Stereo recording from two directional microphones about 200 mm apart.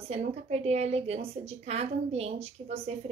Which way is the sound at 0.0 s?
30° right (ahead or behind).